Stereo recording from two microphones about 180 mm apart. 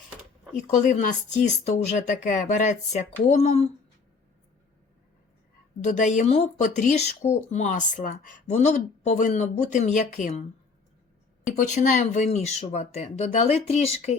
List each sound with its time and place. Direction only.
0.5 s speech: 40° left (ahead or behind)
5.8 s speech: 40° left (ahead or behind)
11.5 s speech: 45° left (ahead or behind)